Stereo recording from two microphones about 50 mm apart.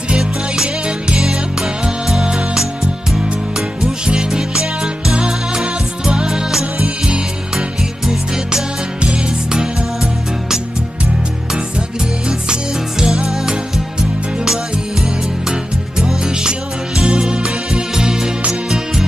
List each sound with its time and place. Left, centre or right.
0.1 s music: centre
9.0 s music: centre
13.0 s music: centre
16.0 s music: centre